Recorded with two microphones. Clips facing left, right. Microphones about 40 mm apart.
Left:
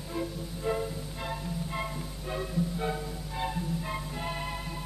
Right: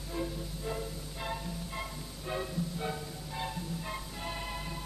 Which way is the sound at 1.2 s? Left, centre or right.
Centre.